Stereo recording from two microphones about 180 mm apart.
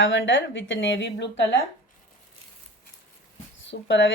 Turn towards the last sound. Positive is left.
turn(degrees=90)